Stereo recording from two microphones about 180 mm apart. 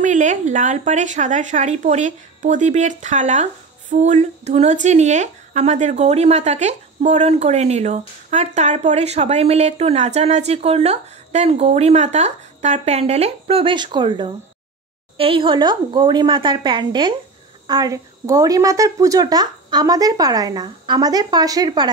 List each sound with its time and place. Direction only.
0.0 s a woman's voice: 45° right (ahead or behind); by 21.9 s 25° right (ahead or behind)